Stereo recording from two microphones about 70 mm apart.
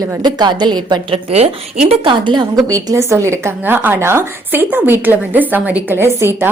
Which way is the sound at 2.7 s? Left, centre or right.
Right.